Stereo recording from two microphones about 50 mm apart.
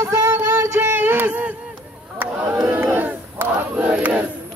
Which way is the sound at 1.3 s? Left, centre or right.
Right.